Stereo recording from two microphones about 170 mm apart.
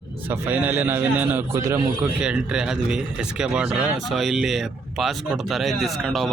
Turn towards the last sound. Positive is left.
turn(degrees=0)  # may be behind; listen again after turning